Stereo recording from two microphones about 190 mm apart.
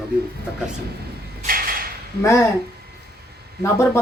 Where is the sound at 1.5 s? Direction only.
50° right (ahead or behind).